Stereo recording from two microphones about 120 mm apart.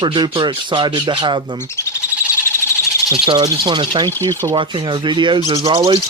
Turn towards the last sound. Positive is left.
turn(degrees=-45)  # may be behind; listen again after turning